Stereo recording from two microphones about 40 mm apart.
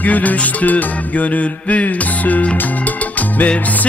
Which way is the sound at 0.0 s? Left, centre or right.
Left.